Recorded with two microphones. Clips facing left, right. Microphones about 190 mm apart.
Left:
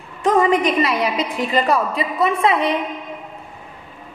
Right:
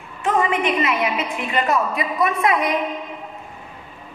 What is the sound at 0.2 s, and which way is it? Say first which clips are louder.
A woman's voice: left 4 dB; 35° left (ahead or behind).